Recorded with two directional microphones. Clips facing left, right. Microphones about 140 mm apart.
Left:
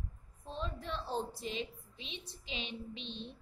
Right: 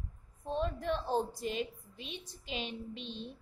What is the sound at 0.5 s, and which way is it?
A woman's voice, 55° right (ahead or behind).